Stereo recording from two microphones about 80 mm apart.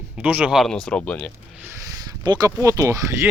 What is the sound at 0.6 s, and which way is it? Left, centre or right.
Speech, centre.